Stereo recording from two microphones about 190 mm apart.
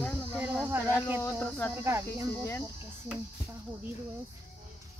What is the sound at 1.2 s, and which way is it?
Speech, 10° left (ahead or behind).